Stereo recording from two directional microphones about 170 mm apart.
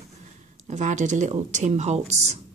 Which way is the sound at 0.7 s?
45° right (ahead or behind).